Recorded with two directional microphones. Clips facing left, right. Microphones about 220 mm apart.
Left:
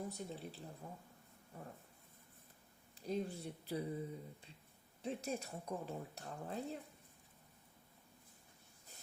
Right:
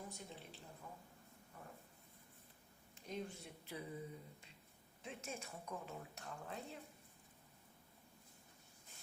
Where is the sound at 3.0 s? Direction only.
35° left (ahead or behind).